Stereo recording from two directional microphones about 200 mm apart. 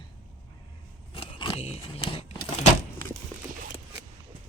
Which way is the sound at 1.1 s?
25° left (ahead or behind).